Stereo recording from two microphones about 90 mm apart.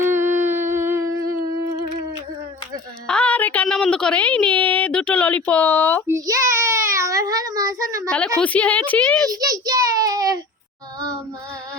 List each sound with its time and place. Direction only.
0.0 s humming: 30° right (ahead or behind)
3.1 s a sound: 15° left (ahead or behind)
3.7 s speech: 10° left (ahead or behind)
6.1 s child singing: 40° right (ahead or behind)
8.0 s speech: 10° left (ahead or behind)
9.3 s a child's voice: 45° right (ahead or behind)